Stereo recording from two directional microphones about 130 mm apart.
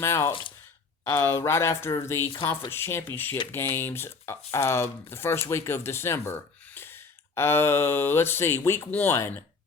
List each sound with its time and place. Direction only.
0.0 s speech: 20° left (ahead or behind)